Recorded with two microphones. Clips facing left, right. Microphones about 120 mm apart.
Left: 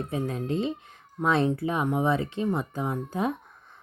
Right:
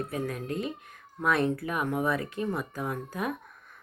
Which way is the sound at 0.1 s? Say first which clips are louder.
Left 4 dB; 25° left (ahead or behind).